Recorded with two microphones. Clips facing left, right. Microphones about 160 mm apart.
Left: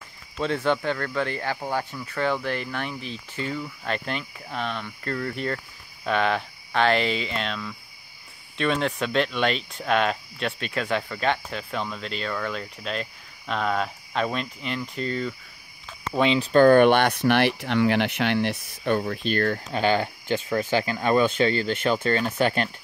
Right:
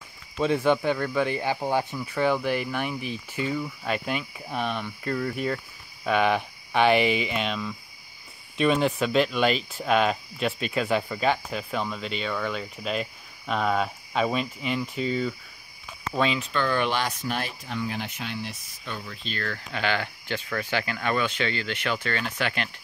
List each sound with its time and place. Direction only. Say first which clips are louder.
0.4 s speech: right 2 dB; 10° right (ahead or behind)
16.3 s speech: left 11 dB; 45° left (ahead or behind)
19.5 s speech: left 5 dB; 35° left (ahead or behind)